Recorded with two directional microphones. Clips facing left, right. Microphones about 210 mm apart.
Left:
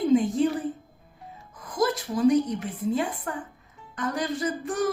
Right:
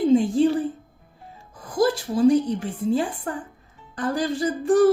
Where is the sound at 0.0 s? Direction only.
30° right (ahead or behind).